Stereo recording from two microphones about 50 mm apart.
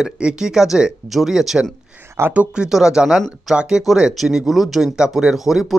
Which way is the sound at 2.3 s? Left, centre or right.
Centre.